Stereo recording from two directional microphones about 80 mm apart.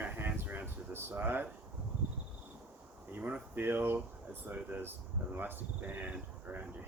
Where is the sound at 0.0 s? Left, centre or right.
Right.